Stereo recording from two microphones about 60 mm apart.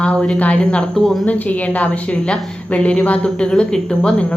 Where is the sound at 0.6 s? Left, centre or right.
Centre.